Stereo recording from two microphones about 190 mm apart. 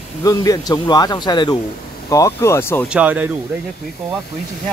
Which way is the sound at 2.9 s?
10° right (ahead or behind).